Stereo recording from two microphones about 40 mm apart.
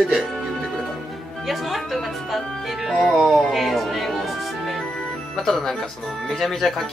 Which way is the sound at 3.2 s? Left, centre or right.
Centre.